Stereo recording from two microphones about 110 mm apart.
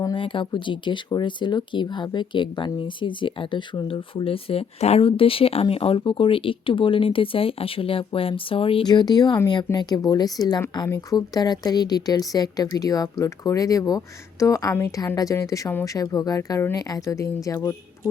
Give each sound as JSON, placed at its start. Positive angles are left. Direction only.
{"t": 0.0, "sound": "speech", "side_deg": 50}
{"t": 8.9, "sound": "a woman's voice", "side_deg": 40}
{"t": 15.0, "sound": "a woman's voice", "side_deg": 35}